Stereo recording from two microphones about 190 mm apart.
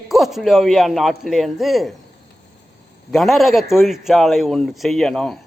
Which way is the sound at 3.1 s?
Centre (ahead or behind).